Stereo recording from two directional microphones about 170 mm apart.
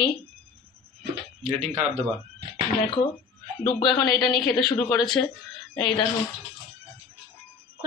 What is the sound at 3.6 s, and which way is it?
Speech, 30° left (ahead or behind).